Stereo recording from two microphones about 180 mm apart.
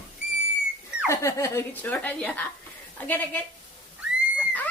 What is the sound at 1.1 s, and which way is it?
Speech, 15° left (ahead or behind).